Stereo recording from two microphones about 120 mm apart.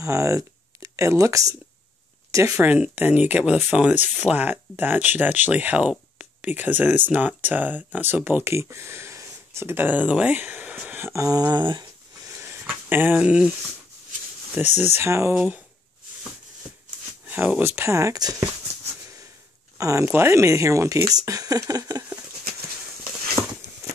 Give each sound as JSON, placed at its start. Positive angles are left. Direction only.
{"t": 0.0, "sound": "speech", "side_deg": -25}
{"t": 11.5, "sound": "dog", "side_deg": -35}
{"t": 12.3, "sound": "a sound", "side_deg": -20}
{"t": 14.6, "sound": "speech", "side_deg": 65}
{"t": 15.0, "sound": "speech", "side_deg": -20}
{"t": 15.3, "sound": "speech", "side_deg": -10}
{"t": 17.3, "sound": "speech", "side_deg": -15}
{"t": 17.7, "sound": "speech", "side_deg": -25}
{"t": 19.8, "sound": "speech", "side_deg": -25}
{"t": 23.4, "sound": "a sound", "side_deg": -30}